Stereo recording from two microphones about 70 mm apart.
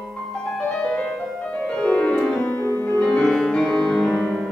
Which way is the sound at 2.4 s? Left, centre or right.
Left.